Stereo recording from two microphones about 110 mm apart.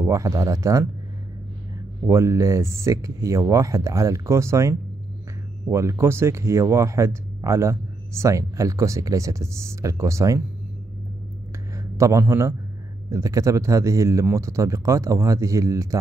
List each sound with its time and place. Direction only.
0.0 s speech: 30° right (ahead or behind)
2.0 s speech: 30° right (ahead or behind)
12.0 s speech: 25° right (ahead or behind)